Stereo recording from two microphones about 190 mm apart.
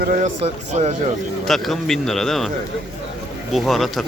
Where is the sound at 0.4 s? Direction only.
35° right (ahead or behind).